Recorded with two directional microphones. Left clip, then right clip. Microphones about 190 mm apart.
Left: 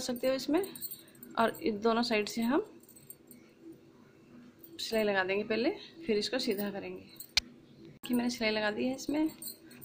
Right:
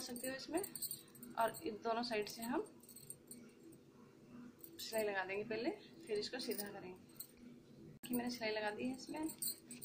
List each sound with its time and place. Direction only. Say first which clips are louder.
0.0 s speech: left 15 dB; 55° left (ahead or behind)
4.7 s a woman's voice: left 10 dB; 55° left (ahead or behind)
8.0 s a woman's voice: left 10 dB; 55° left (ahead or behind)